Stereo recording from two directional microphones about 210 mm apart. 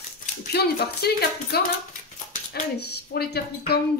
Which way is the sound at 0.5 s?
50° left (ahead or behind).